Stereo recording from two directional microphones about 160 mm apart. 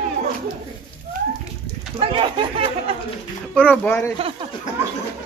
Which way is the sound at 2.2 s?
35° right (ahead or behind).